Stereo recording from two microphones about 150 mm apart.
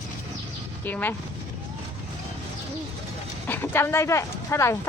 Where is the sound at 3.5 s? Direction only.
15° left (ahead or behind).